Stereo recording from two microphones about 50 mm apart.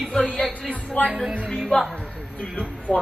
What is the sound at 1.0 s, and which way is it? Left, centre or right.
Speech, centre.